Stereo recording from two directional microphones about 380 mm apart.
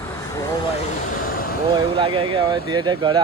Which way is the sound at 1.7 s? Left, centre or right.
Centre.